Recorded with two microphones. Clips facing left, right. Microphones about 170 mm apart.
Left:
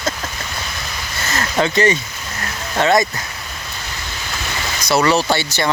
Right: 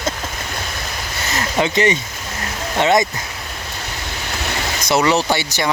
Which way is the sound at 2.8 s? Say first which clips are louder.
Even; 20° right (ahead or behind).